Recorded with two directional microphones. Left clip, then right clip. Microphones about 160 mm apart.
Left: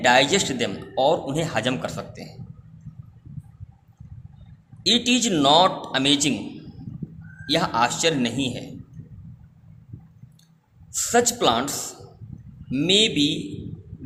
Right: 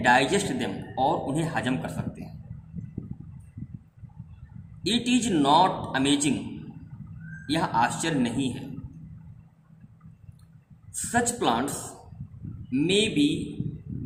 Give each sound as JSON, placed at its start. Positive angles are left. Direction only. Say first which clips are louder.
{"t": 0.0, "sound": "a man's voice", "louder": "left 4 dB", "side_deg": 50}
{"t": 4.9, "sound": "a man's voice", "louder": "left 6 dB", "side_deg": 50}
{"t": 7.4, "sound": "a man's voice", "louder": "left 3 dB", "side_deg": 55}
{"t": 11.1, "sound": "a man's voice", "louder": "left 5 dB", "side_deg": 50}
{"t": 12.7, "sound": "a man's voice", "louder": "left 5 dB", "side_deg": 50}